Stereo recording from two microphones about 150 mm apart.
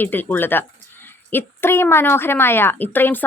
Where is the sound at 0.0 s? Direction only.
15° left (ahead or behind).